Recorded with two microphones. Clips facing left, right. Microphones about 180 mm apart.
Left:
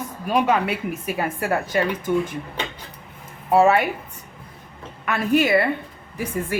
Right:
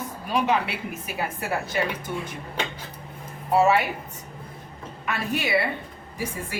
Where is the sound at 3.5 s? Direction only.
55° left (ahead or behind).